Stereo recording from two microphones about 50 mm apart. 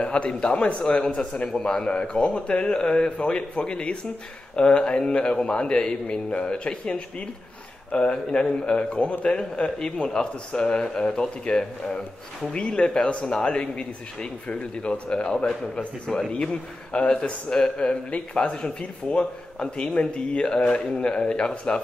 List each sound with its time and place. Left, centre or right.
0.0 s a man's voice: left
16.1 s a man's voice: centre